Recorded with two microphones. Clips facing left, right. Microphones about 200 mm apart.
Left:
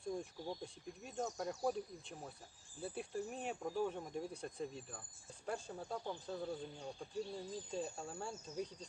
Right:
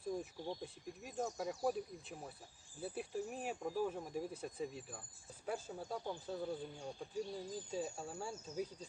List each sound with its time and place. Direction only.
0.0 s speech: 5° right (ahead or behind)